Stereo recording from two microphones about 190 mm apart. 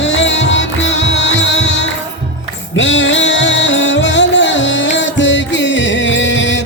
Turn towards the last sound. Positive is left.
turn(degrees=75)  # may be behind; listen again after turning